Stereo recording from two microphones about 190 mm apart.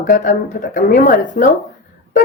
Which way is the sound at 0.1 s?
45° left (ahead or behind).